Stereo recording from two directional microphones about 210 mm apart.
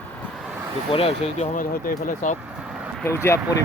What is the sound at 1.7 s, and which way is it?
Speech, 40° left (ahead or behind).